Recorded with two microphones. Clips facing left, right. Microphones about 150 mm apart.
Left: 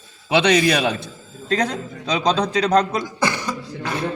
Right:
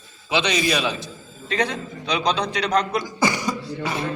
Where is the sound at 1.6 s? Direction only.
45° left (ahead or behind).